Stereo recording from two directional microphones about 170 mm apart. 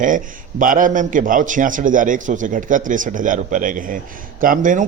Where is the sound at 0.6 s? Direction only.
50° right (ahead or behind).